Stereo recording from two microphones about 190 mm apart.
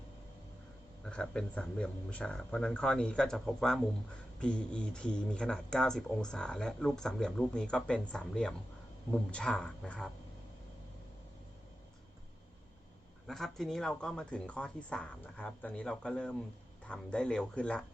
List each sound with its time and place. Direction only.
1.0 s speech: 5° left (ahead or behind)
13.2 s speech: centre (ahead or behind)